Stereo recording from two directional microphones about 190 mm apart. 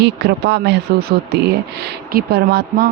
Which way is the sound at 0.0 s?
60° right (ahead or behind).